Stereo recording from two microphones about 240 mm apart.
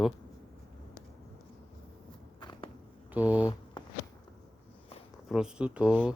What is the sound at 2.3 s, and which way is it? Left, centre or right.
Biting, centre.